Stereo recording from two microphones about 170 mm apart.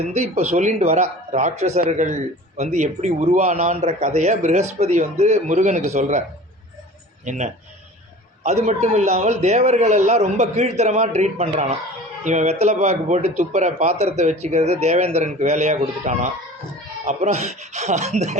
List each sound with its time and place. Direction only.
0.0 s speech: 40° right (ahead or behind)
7.3 s speech: 45° right (ahead or behind)